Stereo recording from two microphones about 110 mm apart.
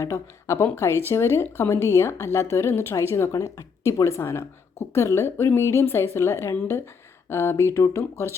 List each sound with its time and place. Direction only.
0.0 s speech: 25° left (ahead or behind)